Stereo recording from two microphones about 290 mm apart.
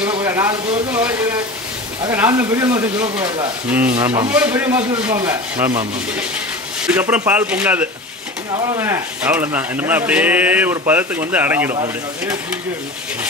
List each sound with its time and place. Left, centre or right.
0.0 s speech: centre
2.0 s speech: centre
4.3 s speech: centre
6.9 s speech: centre